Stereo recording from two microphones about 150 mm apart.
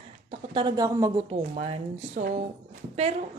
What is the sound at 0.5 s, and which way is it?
Speech, 25° right (ahead or behind).